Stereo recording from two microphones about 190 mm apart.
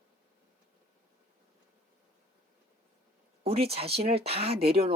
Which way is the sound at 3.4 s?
30° right (ahead or behind).